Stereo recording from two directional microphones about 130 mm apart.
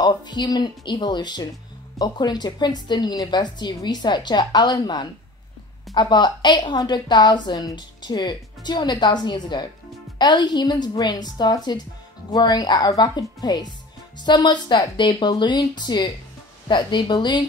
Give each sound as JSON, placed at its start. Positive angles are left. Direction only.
{"t": 0.0, "sound": "a woman's voice", "side_deg": 35}